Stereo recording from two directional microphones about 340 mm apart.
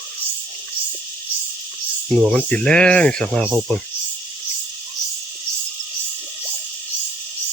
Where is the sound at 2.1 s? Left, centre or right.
Centre.